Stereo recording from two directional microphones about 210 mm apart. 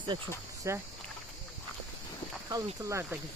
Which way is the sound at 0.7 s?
15° right (ahead or behind).